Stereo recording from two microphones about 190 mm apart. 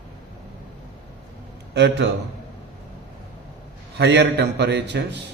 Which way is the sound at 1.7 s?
65° right (ahead or behind).